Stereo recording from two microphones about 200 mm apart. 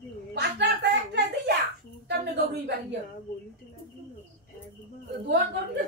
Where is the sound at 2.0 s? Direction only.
55° right (ahead or behind).